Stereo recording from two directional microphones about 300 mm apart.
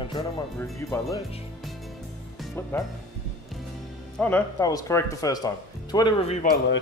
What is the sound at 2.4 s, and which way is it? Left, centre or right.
Speech, centre.